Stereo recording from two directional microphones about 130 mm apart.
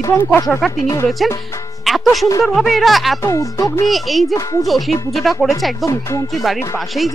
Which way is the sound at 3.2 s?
25° left (ahead or behind).